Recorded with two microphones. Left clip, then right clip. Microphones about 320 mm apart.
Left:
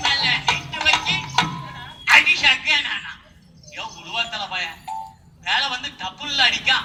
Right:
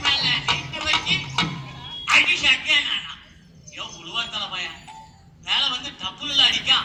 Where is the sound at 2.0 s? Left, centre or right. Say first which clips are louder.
Left 3 dB; left.